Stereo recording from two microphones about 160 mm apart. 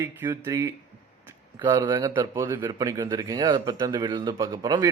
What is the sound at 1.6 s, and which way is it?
A man's voice, 30° right (ahead or behind).